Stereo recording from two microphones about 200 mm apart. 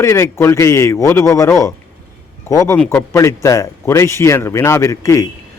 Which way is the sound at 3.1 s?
15° left (ahead or behind).